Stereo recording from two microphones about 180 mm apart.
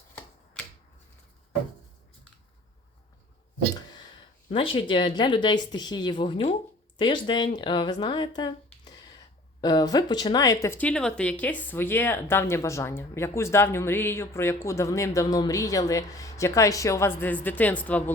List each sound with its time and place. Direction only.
4.5 s speech: 30° left (ahead or behind); by 18.1 s 10° left (ahead or behind)